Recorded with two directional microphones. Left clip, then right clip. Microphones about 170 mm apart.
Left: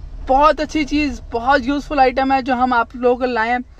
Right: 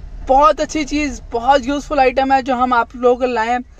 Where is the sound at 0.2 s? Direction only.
15° right (ahead or behind).